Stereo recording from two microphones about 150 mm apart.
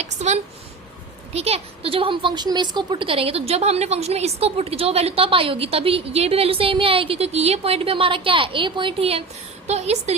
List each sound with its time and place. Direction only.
1.3 s a woman's voice: 45° right (ahead or behind)